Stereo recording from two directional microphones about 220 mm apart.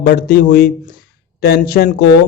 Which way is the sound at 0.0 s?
45° left (ahead or behind).